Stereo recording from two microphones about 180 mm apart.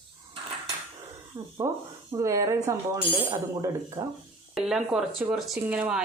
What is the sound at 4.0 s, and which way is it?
Speech, 20° right (ahead or behind).